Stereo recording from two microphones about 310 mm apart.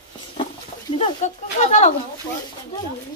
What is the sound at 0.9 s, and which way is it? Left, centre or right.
Speech, centre.